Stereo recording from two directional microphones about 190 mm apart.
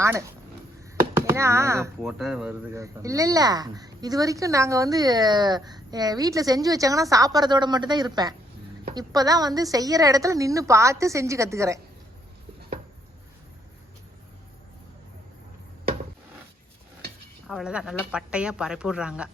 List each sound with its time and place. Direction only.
0.0 s a woman's voice: 15° right (ahead or behind)
2.0 s speech: centre (ahead or behind)
2.7 s a woman's voice: 15° right (ahead or behind)
17.5 s speech: 5° right (ahead or behind)